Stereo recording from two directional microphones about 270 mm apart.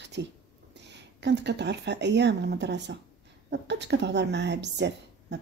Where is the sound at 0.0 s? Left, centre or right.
Right.